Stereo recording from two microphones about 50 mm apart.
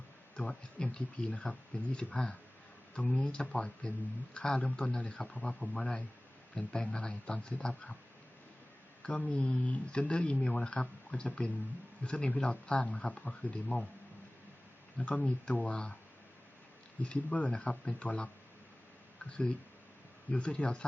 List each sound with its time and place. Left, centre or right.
0.3 s speech: left
4.4 s a man's voice: centre
9.0 s speech: left
14.9 s speech: left
17.0 s speech: left